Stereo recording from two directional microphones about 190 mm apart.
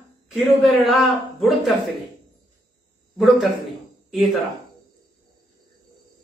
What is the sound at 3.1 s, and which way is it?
A man's voice, centre (ahead or behind).